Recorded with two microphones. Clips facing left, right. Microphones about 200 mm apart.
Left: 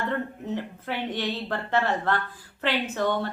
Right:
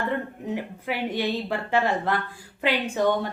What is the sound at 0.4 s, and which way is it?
A woman's voice, 10° right (ahead or behind).